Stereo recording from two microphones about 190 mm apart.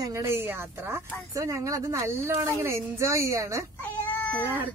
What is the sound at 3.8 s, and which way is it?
Cat, 10° left (ahead or behind).